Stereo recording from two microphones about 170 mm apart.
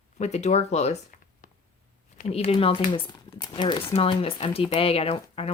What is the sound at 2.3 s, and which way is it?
Speech, 35° left (ahead or behind).